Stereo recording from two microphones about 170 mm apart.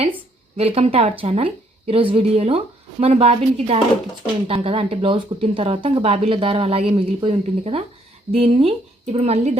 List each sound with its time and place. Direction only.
0.5 s speech: 35° right (ahead or behind)